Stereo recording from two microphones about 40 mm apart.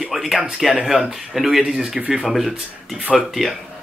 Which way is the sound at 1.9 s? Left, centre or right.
Right.